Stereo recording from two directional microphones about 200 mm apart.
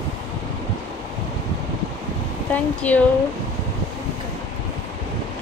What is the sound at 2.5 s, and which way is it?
Speech, 5° left (ahead or behind).